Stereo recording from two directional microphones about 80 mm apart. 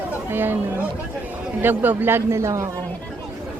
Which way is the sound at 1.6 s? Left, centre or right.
Right.